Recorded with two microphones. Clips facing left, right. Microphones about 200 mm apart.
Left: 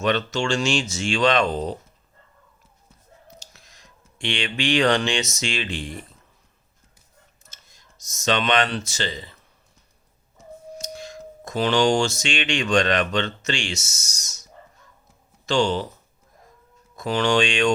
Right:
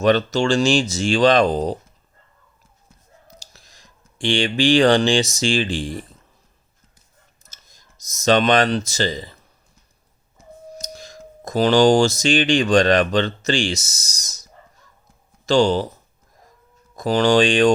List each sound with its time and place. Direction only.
0.0 s speech: 35° right (ahead or behind)
3.4 s speech: 35° right (ahead or behind)
7.4 s speech: 40° right (ahead or behind)
10.8 s speech: 40° right (ahead or behind)
15.4 s speech: 35° right (ahead or behind)
16.9 s speech: 35° right (ahead or behind)